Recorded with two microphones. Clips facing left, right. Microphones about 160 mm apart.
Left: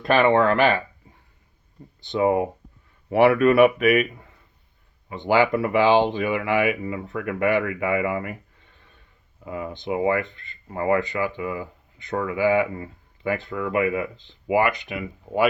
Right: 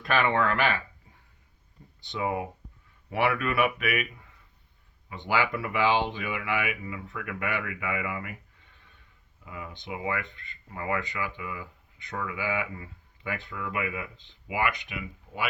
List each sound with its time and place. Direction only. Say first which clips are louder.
0.0 s speech: left 8 dB; 25° left (ahead or behind)
2.0 s speech: left 10 dB; 40° left (ahead or behind)
9.4 s speech: left 10 dB; 40° left (ahead or behind)